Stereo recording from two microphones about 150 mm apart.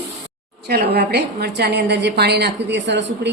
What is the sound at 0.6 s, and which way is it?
A woman's voice, 90° right.